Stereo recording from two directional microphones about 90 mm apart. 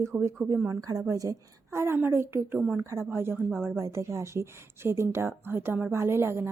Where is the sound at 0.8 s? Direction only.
45° right (ahead or behind).